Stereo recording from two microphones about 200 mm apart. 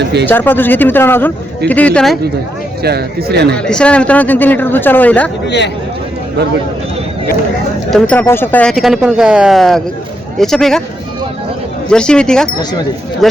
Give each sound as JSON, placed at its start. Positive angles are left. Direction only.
{"t": 0.0, "sound": "a sound", "side_deg": -55}
{"t": 0.3, "sound": "speech", "side_deg": 10}
{"t": 2.8, "sound": "speech", "side_deg": -50}
{"t": 3.5, "sound": "speech", "side_deg": 5}
{"t": 5.5, "sound": "speech", "side_deg": 60}
{"t": 7.9, "sound": "speech", "side_deg": 5}
{"t": 11.9, "sound": "speech", "side_deg": 5}